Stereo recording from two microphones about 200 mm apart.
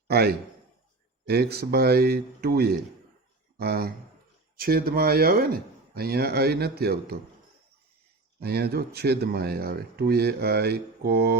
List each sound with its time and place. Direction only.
0.1 s a man's voice: 50° right (ahead or behind)
8.4 s speech: 50° right (ahead or behind)